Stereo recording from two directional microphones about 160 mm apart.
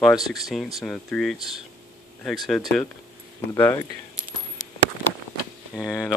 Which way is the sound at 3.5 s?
20° left (ahead or behind).